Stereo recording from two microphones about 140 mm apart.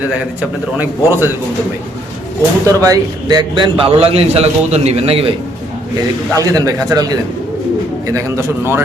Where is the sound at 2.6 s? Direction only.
25° right (ahead or behind).